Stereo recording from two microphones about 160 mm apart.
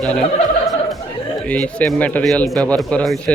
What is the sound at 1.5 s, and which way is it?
Speech, 5° left (ahead or behind).